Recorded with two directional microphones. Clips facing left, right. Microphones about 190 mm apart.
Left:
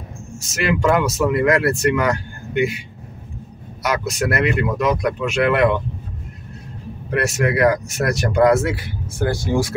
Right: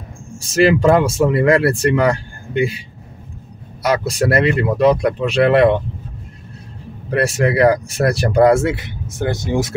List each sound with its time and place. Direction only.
0.4 s speech: 30° right (ahead or behind)
3.8 s speech: 30° right (ahead or behind)
7.1 s speech: 30° right (ahead or behind)